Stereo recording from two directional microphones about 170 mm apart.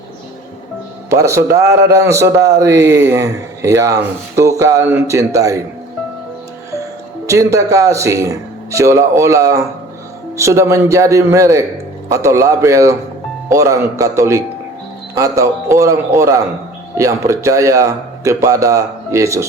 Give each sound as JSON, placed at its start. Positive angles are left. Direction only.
{"t": 1.1, "sound": "a man's voice", "side_deg": -15}
{"t": 7.3, "sound": "a man's voice", "side_deg": -20}